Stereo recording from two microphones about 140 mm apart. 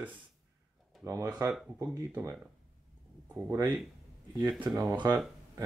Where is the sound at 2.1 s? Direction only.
20° right (ahead or behind).